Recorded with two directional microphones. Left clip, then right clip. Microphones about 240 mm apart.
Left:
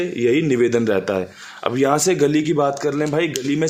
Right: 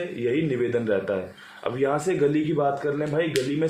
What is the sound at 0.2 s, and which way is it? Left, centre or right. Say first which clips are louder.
A man's voice: left 8 dB; left.